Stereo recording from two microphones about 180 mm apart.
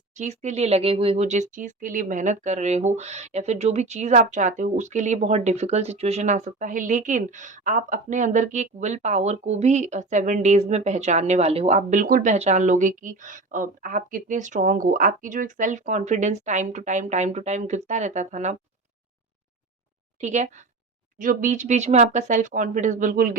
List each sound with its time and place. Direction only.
0.1 s speech: 40° right (ahead or behind)
12.3 s speech: 40° right (ahead or behind)
20.2 s speech: 40° right (ahead or behind)